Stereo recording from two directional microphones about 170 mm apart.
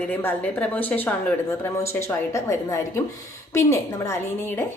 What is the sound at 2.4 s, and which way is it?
Speech, 15° left (ahead or behind).